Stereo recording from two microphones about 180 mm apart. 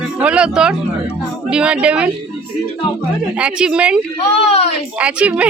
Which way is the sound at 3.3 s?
5° right (ahead or behind).